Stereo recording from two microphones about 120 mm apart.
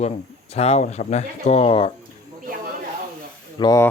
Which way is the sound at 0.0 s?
60° left (ahead or behind).